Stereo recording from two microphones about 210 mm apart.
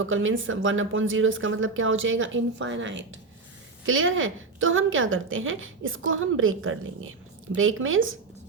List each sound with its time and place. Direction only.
0.0 s a woman's voice: 65° right (ahead or behind)